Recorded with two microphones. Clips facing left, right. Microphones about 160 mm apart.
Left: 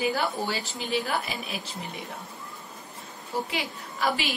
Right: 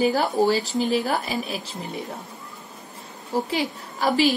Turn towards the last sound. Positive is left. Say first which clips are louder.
# right 8 dB
turn(degrees=-40)  # may be behind; listen again after turning